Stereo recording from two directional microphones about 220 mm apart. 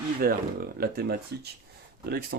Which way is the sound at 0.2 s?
40° right (ahead or behind).